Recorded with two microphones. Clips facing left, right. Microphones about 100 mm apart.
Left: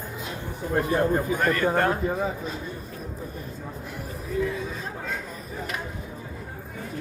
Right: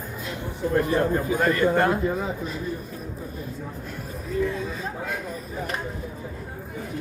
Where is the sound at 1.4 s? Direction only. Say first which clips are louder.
Right 3 dB; 5° right (ahead or behind).